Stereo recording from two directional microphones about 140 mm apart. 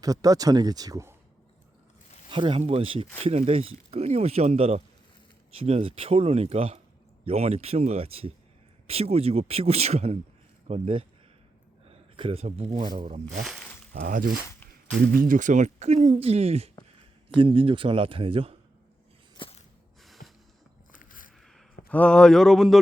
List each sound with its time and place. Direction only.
0.0 s speech: 25° right (ahead or behind)
2.3 s a man's voice: 35° right (ahead or behind)
13.4 s speech: centre (ahead or behind)
13.9 s a man's voice: 85° right; by 18.5 s 40° right (ahead or behind)
19.4 s a sound: 35° left (ahead or behind)
20.0 s music: centre (ahead or behind)
20.9 s a sound: 75° left (ahead or behind)
21.4 s speech: 5° left (ahead or behind)